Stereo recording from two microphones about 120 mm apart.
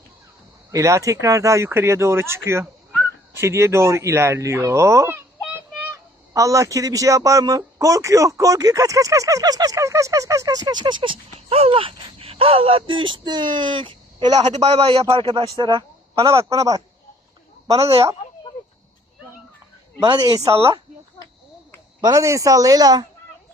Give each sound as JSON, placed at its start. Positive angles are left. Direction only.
{"t": 0.7, "sound": "a man's voice", "side_deg": -25}
{"t": 6.3, "sound": "a man's voice", "side_deg": -25}
{"t": 11.3, "sound": "speech", "side_deg": -55}
{"t": 14.3, "sound": "a man's voice", "side_deg": -65}
{"t": 15.5, "sound": "speech", "side_deg": -35}
{"t": 16.1, "sound": "a man's voice", "side_deg": -50}
{"t": 16.4, "sound": "a man's voice", "side_deg": -30}
{"t": 20.0, "sound": "speech", "side_deg": -35}
{"t": 22.0, "sound": "a man's voice", "side_deg": -25}